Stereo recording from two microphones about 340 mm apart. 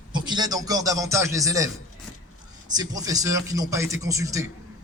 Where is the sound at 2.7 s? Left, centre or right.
Centre.